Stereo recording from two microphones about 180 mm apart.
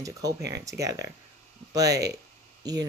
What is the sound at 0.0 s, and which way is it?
Speech, 20° right (ahead or behind).